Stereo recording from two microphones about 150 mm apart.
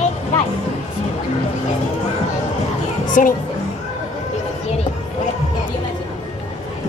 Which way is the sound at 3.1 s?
60° left (ahead or behind).